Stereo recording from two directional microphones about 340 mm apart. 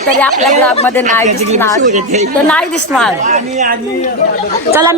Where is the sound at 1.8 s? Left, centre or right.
Right.